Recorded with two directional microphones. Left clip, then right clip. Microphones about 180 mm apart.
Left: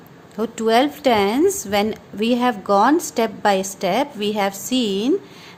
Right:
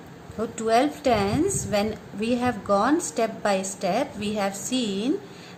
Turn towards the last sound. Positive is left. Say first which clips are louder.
# left 6 dB
turn(degrees=50)  # may be behind; listen again after turning